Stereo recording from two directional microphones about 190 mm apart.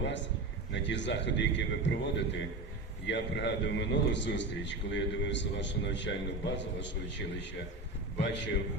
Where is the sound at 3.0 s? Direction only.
65° left (ahead or behind).